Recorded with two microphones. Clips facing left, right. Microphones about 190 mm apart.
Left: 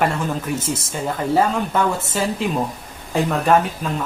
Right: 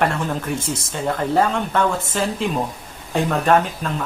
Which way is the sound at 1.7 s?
5° left (ahead or behind).